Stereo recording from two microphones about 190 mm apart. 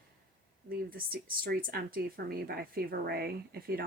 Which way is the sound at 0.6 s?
50° right (ahead or behind).